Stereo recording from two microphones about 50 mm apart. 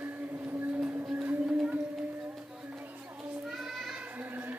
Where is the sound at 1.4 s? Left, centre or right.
Centre.